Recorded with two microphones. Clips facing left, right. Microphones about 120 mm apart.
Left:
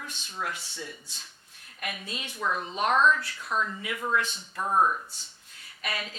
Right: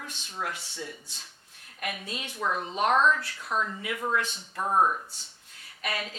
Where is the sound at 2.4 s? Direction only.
35° right (ahead or behind).